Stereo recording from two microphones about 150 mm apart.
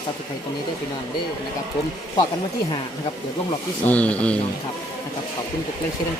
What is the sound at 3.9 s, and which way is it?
Speech, 10° left (ahead or behind).